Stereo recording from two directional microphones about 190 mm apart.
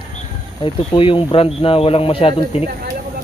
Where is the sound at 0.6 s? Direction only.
25° left (ahead or behind).